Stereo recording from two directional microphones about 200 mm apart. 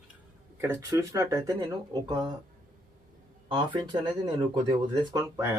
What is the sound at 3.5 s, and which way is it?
Speech, 25° right (ahead or behind).